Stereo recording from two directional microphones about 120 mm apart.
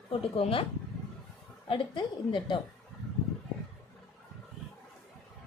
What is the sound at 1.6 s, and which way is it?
Speech, 45° left (ahead or behind).